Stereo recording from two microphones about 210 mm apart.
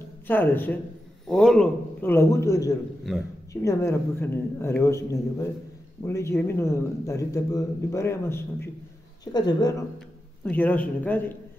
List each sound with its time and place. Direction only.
0.3 s a man's voice: 10° left (ahead or behind)
10.4 s a man's voice: 5° left (ahead or behind)